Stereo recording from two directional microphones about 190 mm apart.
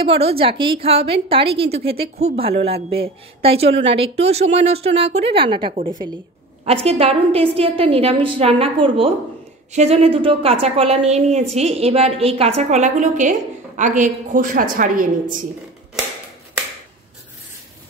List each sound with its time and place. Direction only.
0.0 s a woman's voice: 30° right (ahead or behind); by 15.0 s 45° right (ahead or behind)